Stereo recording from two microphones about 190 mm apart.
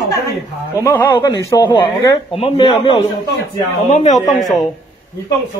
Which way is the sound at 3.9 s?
40° left (ahead or behind).